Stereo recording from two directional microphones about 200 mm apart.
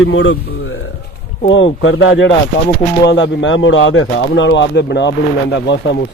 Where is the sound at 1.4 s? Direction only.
70° left (ahead or behind).